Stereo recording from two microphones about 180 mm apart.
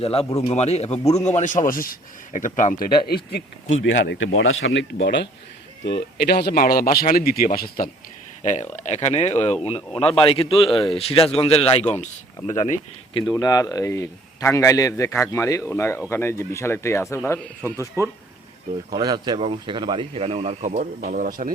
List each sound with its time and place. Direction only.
0.0 s a man's voice: 35° left (ahead or behind); by 2.9 s 50° left (ahead or behind)
3.1 s speech: 60° left (ahead or behind)
8.7 s a man's voice: 40° left (ahead or behind)
13.3 s a man's voice: 20° left (ahead or behind)
17.6 s speech: 15° right (ahead or behind); by 21.5 s 50° right (ahead or behind)